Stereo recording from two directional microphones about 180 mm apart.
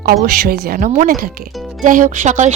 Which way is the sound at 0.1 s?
55° right (ahead or behind).